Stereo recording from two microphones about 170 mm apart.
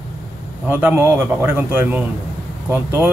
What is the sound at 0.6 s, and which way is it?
A man's voice, 10° right (ahead or behind).